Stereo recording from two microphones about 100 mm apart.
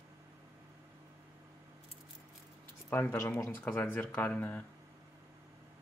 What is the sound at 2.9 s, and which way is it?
Speech, 20° left (ahead or behind).